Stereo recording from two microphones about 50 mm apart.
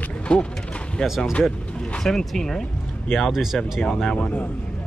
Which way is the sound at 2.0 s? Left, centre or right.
Centre.